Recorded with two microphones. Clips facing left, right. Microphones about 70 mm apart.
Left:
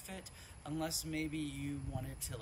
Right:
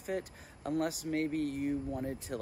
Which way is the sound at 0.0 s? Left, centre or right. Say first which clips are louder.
Right 13 dB; right.